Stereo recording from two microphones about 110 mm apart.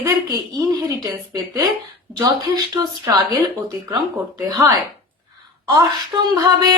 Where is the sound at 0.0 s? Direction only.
35° right (ahead or behind).